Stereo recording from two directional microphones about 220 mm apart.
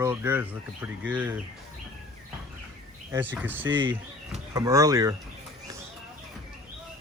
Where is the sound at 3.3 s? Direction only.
10° right (ahead or behind).